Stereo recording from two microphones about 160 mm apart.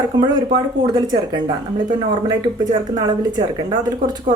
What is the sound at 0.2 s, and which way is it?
A woman's voice, 25° right (ahead or behind).